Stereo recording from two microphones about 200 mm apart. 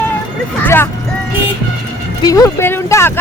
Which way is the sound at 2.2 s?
15° left (ahead or behind).